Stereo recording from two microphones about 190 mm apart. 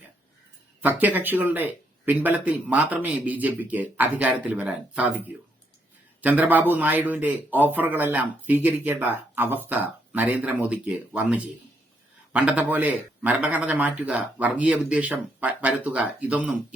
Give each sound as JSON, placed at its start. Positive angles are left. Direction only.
{"t": 0.8, "sound": "a man's voice", "side_deg": -10}
{"t": 6.2, "sound": "a man's voice", "side_deg": -10}